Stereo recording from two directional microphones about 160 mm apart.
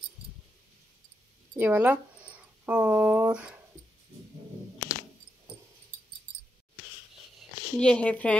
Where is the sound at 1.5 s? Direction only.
10° right (ahead or behind).